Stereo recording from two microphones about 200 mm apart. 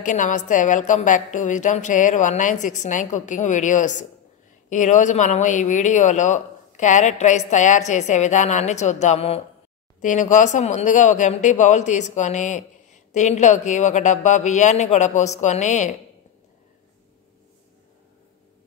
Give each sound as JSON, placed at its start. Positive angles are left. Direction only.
{"t": 0.0, "sound": "speech", "side_deg": 40}